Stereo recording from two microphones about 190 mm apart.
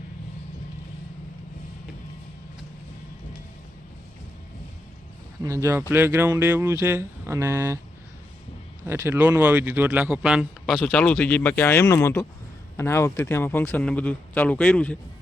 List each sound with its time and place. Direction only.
5.4 s speech: 15° right (ahead or behind)
8.9 s a man's voice: 10° right (ahead or behind); by 14.9 s 5° left (ahead or behind)